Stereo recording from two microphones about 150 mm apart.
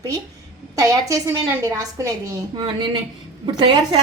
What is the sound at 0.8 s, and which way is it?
A woman's voice, 20° right (ahead or behind).